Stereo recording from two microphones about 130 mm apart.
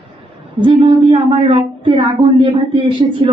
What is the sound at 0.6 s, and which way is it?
A woman's voice, 40° right (ahead or behind).